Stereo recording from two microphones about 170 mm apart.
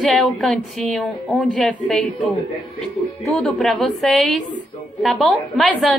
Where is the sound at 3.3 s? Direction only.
Centre (ahead or behind).